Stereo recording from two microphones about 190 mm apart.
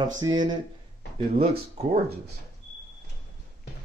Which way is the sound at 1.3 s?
35° right (ahead or behind).